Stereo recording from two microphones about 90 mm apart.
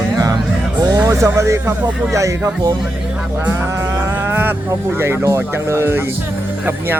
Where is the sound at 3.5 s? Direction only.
25° right (ahead or behind).